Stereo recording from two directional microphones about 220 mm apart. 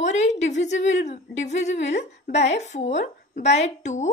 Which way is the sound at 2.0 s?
50° left (ahead or behind).